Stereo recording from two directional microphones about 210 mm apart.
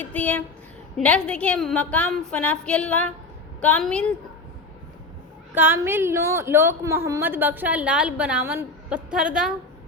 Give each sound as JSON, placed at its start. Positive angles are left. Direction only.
{"t": 0.0, "sound": "a woman's voice", "side_deg": 5}
{"t": 5.5, "sound": "a woman's voice", "side_deg": -10}